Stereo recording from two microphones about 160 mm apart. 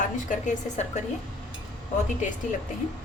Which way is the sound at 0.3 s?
50° left (ahead or behind).